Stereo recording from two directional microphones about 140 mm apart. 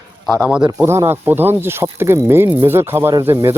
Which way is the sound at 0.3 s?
5° right (ahead or behind).